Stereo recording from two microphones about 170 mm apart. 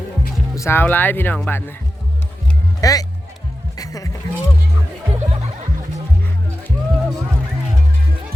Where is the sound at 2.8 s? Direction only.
20° left (ahead or behind).